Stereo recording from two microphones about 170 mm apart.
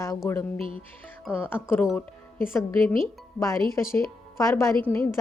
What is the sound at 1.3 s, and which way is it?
A woman's voice, 10° left (ahead or behind).